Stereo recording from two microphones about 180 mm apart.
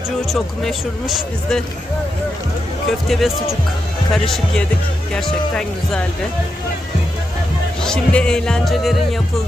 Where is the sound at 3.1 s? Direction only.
Centre (ahead or behind).